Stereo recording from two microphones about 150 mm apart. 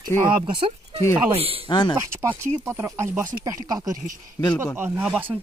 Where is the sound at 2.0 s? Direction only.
15° right (ahead or behind).